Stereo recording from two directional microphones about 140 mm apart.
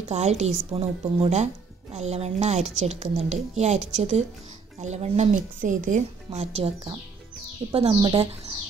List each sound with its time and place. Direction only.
0.1 s speech: 50° right (ahead or behind)
7.9 s speech: 35° right (ahead or behind)